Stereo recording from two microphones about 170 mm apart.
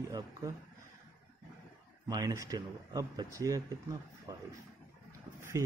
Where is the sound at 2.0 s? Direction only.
25° right (ahead or behind).